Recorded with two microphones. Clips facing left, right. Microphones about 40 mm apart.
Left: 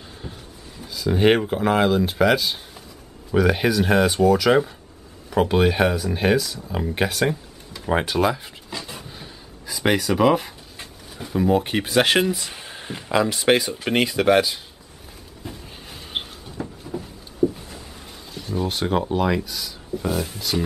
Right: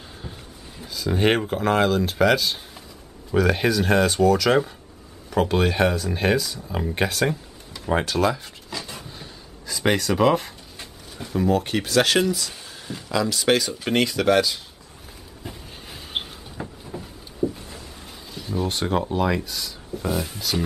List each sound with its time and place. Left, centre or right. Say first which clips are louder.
0.2 s a sound: left 2 dB; centre
0.8 s speech: left 3 dB; centre
15.4 s vehicle: left 1 dB; centre
16.6 s a sound: left 3 dB; centre
16.9 s vehicle: left 3 dB; centre
18.3 s speech: left 1 dB; centre